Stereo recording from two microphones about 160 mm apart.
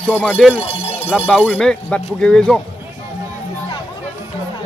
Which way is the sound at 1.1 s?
5° right (ahead or behind).